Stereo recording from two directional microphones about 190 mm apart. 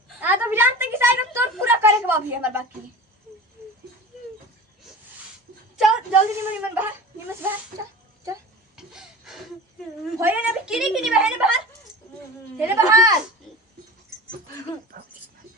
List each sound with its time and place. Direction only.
0.2 s a sound: 10° right (ahead or behind)
5.7 s a woman's voice: 5° right (ahead or behind)
8.7 s a sound: 5° right (ahead or behind)
10.2 s a woman's voice: 10° right (ahead or behind)
12.5 s speech: 10° right (ahead or behind)
14.9 s dog: 50° right (ahead or behind)